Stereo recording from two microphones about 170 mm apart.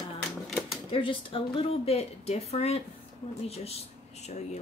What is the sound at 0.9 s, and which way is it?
A woman's voice, 30° left (ahead or behind).